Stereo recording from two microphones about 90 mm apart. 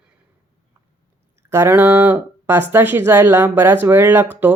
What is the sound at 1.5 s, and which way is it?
Speech, 30° right (ahead or behind).